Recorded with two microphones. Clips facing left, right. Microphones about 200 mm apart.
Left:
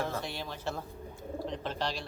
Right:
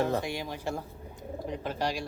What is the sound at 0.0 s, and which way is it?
Speech, 15° right (ahead or behind).